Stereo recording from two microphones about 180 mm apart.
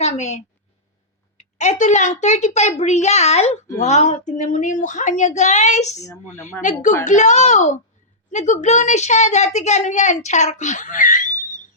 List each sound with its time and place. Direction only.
0.0 s a woman's voice: 40° left (ahead or behind)
1.5 s a woman's voice: 40° left (ahead or behind)
6.0 s a woman's voice: 20° left (ahead or behind)
6.6 s a woman's voice: 45° left (ahead or behind)